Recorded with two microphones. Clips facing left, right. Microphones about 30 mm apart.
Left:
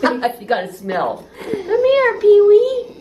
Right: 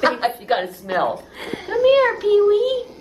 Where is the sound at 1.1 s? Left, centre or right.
Right.